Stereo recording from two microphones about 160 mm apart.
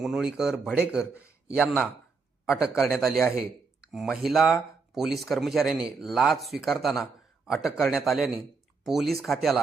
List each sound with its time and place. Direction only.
0.0 s speech: centre (ahead or behind)
1.1 s a sound: 15° left (ahead or behind)
2.5 s speech: 5° right (ahead or behind)